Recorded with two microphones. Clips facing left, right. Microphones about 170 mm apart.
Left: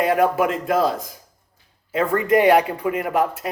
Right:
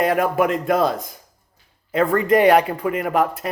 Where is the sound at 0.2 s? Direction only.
55° right (ahead or behind).